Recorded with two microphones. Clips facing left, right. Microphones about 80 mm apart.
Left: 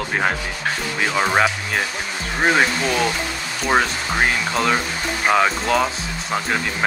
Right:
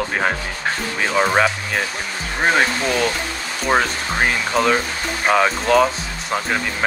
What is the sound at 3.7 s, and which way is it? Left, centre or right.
Speech, centre.